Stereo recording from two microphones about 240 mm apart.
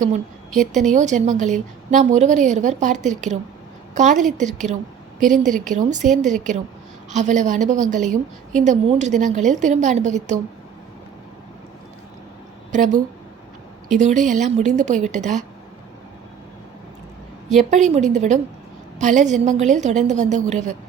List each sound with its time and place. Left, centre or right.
0.6 s a woman's voice: right
12.7 s a woman's voice: right
17.6 s a woman's voice: right